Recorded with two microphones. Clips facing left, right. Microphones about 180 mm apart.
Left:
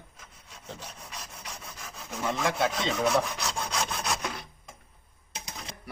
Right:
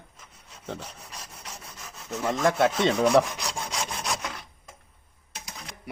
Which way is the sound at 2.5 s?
50° right (ahead or behind).